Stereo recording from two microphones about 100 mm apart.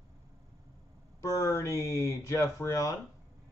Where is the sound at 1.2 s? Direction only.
30° left (ahead or behind).